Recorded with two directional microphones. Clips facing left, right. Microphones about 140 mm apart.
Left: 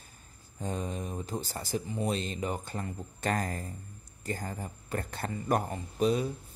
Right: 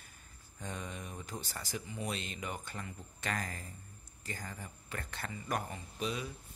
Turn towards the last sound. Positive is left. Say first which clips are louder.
# left 11 dB
turn(degrees=40)  # may be behind; listen again after turning